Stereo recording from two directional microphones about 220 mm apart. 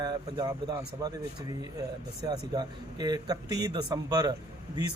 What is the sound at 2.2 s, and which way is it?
Speech, 20° right (ahead or behind).